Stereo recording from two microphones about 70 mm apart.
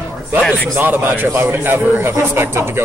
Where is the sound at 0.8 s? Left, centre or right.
Right.